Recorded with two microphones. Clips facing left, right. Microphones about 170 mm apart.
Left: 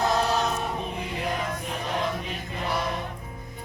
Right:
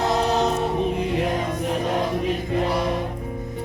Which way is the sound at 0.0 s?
20° right (ahead or behind).